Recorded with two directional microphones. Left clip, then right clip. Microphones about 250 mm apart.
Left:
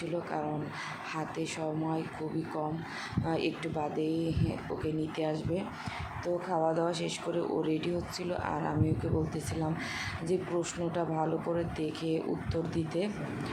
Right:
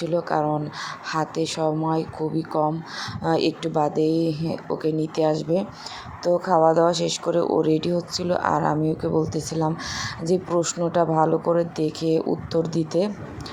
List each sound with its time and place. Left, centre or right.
0.0 s speech: right